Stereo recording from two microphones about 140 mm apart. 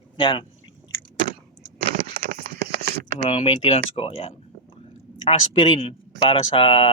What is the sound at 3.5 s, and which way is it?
Speech, 40° left (ahead or behind).